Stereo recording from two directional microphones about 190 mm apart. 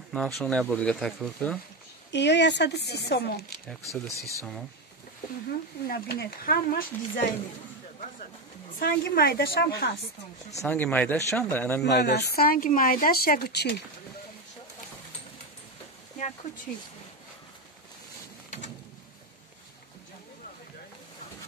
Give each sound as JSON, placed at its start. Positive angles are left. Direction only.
{"t": 0.1, "sound": "speech", "side_deg": 5}
{"t": 2.1, "sound": "speech", "side_deg": 65}
{"t": 4.2, "sound": "speech", "side_deg": -15}
{"t": 5.9, "sound": "speech", "side_deg": 55}
{"t": 8.7, "sound": "speech", "side_deg": 55}
{"t": 10.6, "sound": "speech", "side_deg": 5}
{"t": 11.8, "sound": "speech", "side_deg": 60}